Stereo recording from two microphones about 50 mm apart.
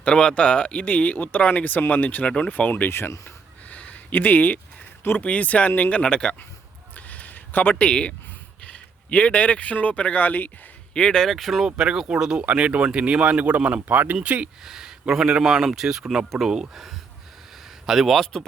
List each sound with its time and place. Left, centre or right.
0.0 s speech: centre; by 2.9 s left
2.9 s speech: left
3.7 s a sound: left
5.2 s speech: left
6.9 s a sound: left
7.8 s speech: left
10.9 s speech: centre
11.3 s speech: centre
11.6 s speech: centre
12.4 s speech: right
13.8 s speech: right
14.6 s speech: centre
17.8 s speech: centre